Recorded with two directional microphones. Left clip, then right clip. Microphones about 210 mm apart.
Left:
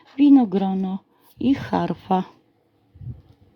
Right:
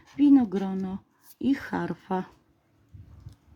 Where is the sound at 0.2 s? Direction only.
15° left (ahead or behind).